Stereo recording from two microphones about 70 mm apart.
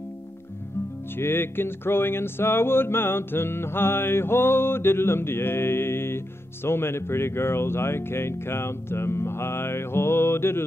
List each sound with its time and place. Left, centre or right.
1.1 s music: left